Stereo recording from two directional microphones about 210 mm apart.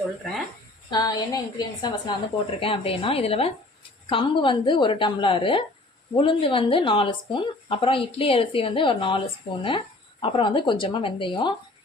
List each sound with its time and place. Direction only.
0.9 s speech: 20° left (ahead or behind)